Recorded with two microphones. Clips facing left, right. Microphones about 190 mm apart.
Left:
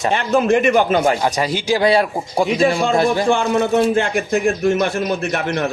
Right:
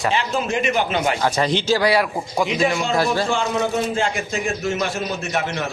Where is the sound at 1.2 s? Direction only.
10° left (ahead or behind); by 2.8 s 30° left (ahead or behind).